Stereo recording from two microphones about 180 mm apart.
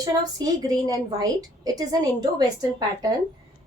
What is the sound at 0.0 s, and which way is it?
A woman's voice, 20° right (ahead or behind).